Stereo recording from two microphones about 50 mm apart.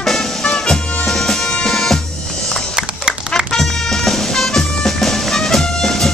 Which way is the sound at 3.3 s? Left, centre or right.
Centre.